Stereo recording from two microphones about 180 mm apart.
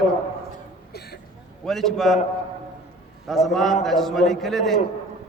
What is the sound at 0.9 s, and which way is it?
Speech, 60° left (ahead or behind).